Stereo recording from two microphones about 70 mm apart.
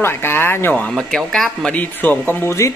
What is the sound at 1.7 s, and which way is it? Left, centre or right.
Speech, left.